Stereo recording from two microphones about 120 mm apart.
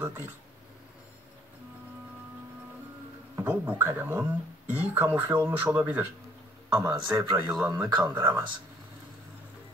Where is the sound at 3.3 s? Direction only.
15° right (ahead or behind).